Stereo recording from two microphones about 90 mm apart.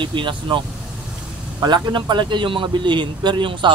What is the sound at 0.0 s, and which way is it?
Speech, 65° right (ahead or behind).